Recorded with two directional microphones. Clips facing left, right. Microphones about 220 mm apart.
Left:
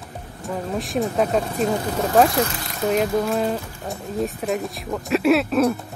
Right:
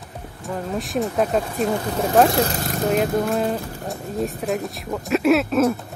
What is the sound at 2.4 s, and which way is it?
Speech, 40° right (ahead or behind).